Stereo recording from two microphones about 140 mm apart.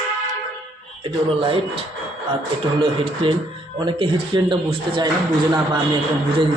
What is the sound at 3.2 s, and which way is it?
A man's voice, 40° right (ahead or behind).